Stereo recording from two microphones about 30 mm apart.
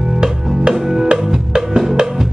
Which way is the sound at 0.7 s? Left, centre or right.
Centre.